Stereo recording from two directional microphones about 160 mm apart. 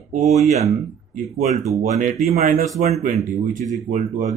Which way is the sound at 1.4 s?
45° right (ahead or behind).